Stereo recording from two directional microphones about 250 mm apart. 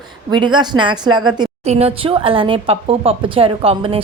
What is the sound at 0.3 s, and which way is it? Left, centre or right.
A woman's voice, centre.